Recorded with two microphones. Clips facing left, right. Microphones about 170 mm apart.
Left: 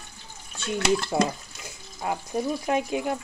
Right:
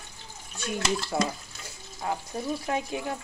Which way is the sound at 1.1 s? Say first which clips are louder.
Left 4 dB; 25° left (ahead or behind).